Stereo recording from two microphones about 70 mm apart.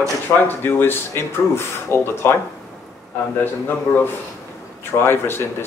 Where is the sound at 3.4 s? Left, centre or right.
Left.